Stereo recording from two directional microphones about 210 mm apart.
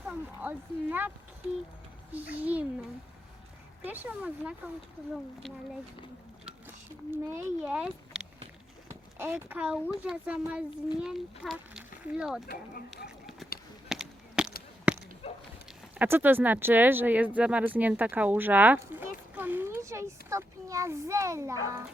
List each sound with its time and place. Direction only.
0.1 s speech: 10° right (ahead or behind)
2.1 s speech: 5° right (ahead or behind)
3.8 s speech: 10° right (ahead or behind)
7.1 s a child's voice: 10° right (ahead or behind)
13.1 s a sound: centre (ahead or behind)
15.2 s a sound: 30° left (ahead or behind)
16.0 s speech: 10° right (ahead or behind)